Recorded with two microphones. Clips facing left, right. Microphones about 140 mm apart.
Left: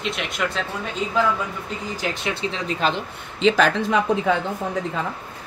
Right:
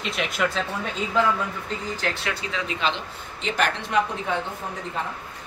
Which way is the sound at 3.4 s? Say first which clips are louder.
Left 12 dB; 90° left.